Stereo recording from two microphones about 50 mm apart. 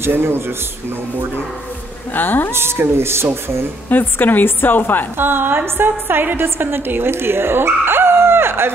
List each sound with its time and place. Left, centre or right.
0.0 s a woman's voice: right
2.1 s a woman's voice: left
2.5 s speech: right
3.9 s a woman's voice: left
5.1 s a woman's voice: right